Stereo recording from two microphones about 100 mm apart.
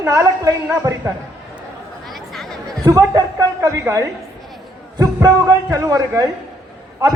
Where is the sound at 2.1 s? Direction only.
Centre (ahead or behind).